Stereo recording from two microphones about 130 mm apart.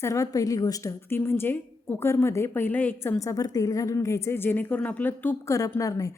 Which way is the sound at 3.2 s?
25° left (ahead or behind).